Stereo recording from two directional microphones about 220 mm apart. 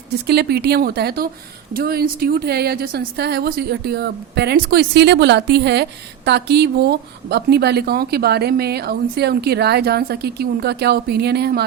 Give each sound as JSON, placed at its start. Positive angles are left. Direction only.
{"t": 0.3, "sound": "a woman's voice", "side_deg": -45}